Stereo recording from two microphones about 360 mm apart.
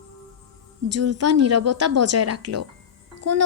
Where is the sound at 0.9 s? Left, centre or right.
Right.